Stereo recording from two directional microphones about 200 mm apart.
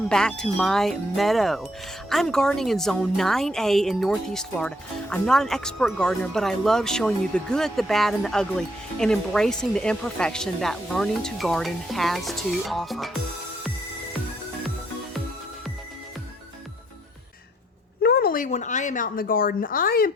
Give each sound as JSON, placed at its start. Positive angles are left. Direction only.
{"t": 0.1, "sound": "a woman's voice", "side_deg": 5}
{"t": 18.0, "sound": "speech", "side_deg": 50}